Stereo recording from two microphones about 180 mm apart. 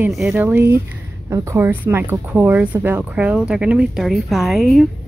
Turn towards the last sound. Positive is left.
turn(degrees=0)  # may be behind; listen again after turning